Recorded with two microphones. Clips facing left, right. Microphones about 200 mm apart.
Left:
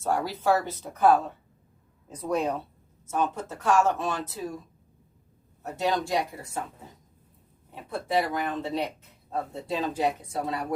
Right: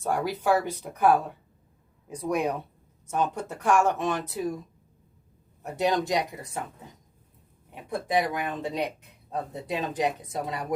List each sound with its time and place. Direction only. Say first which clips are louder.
0.0 s speech: even; 15° right (ahead or behind)
5.6 s speech: right 2 dB; 20° right (ahead or behind)
7.9 s speech: right 1 dB; 15° right (ahead or behind)